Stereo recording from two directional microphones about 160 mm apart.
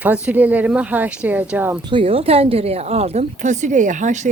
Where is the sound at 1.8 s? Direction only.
35° right (ahead or behind).